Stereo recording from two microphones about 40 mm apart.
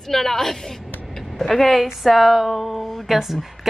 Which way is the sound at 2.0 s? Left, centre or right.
Centre.